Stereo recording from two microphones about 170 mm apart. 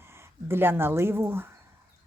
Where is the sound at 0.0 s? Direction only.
15° right (ahead or behind).